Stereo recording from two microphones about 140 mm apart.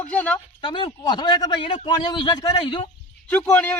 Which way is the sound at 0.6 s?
35° left (ahead or behind).